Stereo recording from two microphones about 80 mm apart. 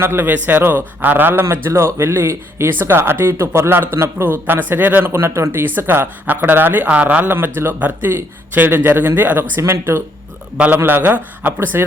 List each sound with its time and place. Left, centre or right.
0.0 s a man's voice: right